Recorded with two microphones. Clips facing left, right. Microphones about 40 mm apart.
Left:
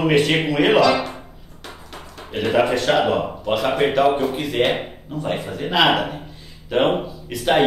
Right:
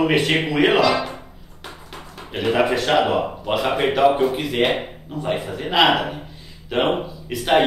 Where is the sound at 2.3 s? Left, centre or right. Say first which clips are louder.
Left 1 dB; centre.